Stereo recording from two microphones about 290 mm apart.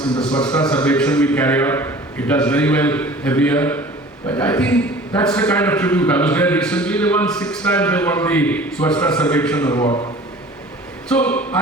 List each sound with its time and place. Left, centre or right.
0.2 s a man's voice: centre
9.8 s a man's voice: centre
11.1 s a man's voice: centre